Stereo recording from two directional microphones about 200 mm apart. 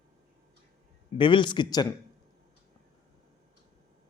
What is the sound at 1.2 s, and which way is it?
Speech, 25° left (ahead or behind).